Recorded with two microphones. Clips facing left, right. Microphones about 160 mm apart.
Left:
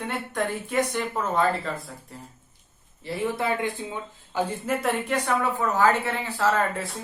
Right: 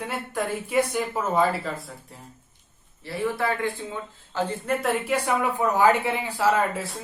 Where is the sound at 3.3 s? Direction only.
20° left (ahead or behind).